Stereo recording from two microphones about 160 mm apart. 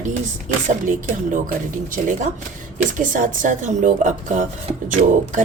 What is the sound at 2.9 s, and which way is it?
Speech, 55° right (ahead or behind).